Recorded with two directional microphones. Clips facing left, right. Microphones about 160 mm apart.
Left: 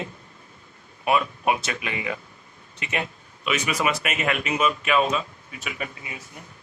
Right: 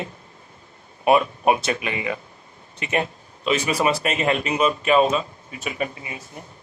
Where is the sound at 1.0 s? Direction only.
30° right (ahead or behind).